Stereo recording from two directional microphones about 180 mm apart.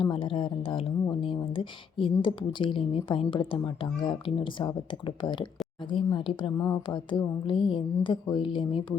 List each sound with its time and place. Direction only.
0.0 s a woman's voice: 30° left (ahead or behind)